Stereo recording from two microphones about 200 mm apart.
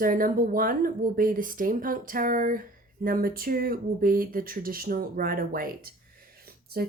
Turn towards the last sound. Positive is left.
turn(degrees=-50)  # may be behind; listen again after turning